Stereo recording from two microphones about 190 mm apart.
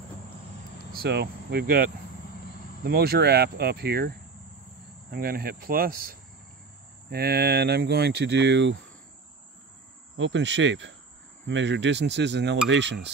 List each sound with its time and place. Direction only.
0.9 s speech: 60° right (ahead or behind)
5.1 s speech: 50° right (ahead or behind); by 8.7 s 70° right (ahead or behind)
10.1 s cricket: 70° right (ahead or behind)
11.4 s speech: 70° right (ahead or behind)